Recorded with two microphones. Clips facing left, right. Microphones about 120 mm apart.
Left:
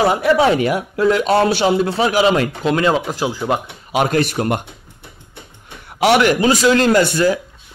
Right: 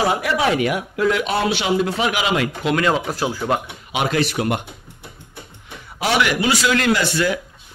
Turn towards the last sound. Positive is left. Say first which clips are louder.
# left 6 dB
turn(degrees=50)  # may be behind; listen again after turning